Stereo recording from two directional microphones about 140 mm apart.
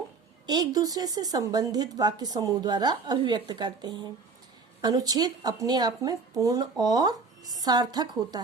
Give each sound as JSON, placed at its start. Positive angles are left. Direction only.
{"t": 0.4, "sound": "a woman's voice", "side_deg": -30}